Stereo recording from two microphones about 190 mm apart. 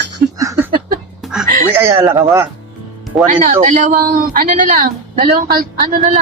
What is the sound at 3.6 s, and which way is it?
Speech, 45° right (ahead or behind).